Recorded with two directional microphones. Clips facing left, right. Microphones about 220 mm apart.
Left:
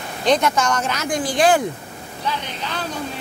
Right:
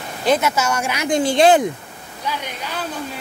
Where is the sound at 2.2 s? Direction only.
10° right (ahead or behind).